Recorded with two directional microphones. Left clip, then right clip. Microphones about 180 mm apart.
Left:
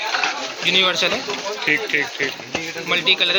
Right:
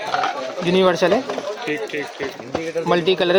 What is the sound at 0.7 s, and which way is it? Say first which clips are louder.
Speech: right 2 dB; 40° right (ahead or behind).